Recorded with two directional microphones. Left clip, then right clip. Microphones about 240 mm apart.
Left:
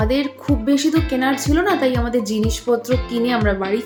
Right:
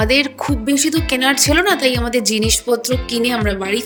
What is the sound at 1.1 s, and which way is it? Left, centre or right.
Speech, right.